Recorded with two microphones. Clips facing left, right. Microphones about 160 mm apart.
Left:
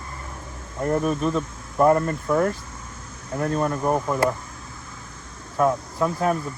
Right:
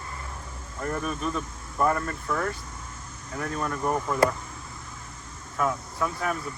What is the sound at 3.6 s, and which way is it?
Speech, 25° left (ahead or behind).